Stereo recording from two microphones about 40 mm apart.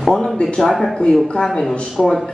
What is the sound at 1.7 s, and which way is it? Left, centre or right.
Speech, centre.